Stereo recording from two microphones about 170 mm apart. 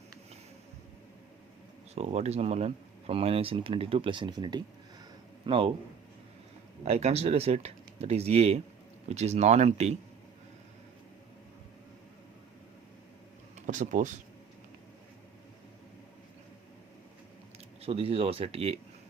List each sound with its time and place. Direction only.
2.0 s speech: 40° right (ahead or behind)
6.8 s speech: 40° right (ahead or behind)
13.7 s speech: 45° right (ahead or behind)
17.8 s speech: 35° right (ahead or behind)